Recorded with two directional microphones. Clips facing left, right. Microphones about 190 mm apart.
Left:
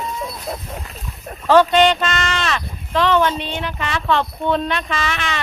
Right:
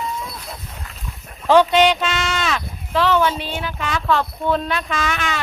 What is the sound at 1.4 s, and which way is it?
Speech, 15° right (ahead or behind).